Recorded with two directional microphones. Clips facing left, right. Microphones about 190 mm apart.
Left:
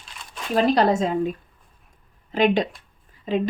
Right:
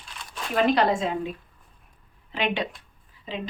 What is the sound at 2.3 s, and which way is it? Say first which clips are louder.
Speech: left 8 dB; 40° left (ahead or behind).